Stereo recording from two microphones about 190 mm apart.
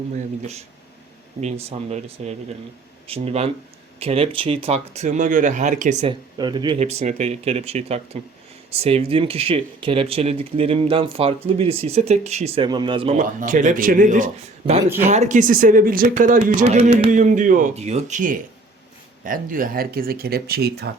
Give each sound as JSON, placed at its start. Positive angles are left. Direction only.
{"t": 1.4, "sound": "speech", "side_deg": -35}
{"t": 6.3, "sound": "speech", "side_deg": -25}